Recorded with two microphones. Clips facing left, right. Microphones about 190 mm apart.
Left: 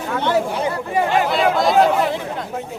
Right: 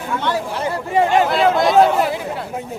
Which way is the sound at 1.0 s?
25° right (ahead or behind).